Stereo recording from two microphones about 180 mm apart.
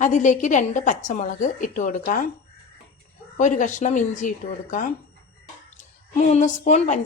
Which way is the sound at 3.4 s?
45° left (ahead or behind).